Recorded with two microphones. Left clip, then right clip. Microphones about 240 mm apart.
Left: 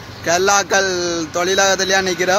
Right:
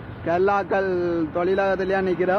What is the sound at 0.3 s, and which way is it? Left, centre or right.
Speech, centre.